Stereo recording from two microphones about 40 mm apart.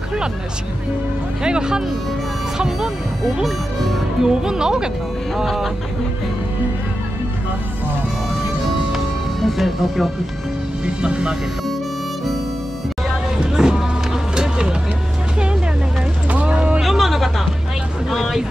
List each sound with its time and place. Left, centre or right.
1.4 s speech: right
3.4 s speech: centre
4.2 s speech: centre
8.9 s music: centre
11.0 s speech: right
13.4 s a sound: centre
16.3 s a sound: right
16.8 s music: centre